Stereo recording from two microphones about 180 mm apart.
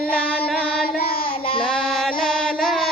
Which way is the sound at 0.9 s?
55° left (ahead or behind).